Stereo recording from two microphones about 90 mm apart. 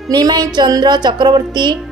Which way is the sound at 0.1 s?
50° right (ahead or behind).